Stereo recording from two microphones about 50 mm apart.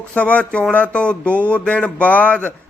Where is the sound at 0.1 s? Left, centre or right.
Left.